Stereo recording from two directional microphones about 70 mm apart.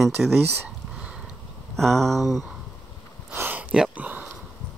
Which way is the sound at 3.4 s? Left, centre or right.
Right.